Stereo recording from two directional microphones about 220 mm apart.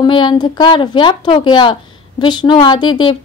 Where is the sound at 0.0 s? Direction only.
20° left (ahead or behind).